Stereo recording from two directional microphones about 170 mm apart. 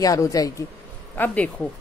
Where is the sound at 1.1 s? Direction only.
10° left (ahead or behind).